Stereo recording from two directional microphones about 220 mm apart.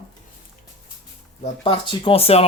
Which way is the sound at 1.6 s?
25° left (ahead or behind).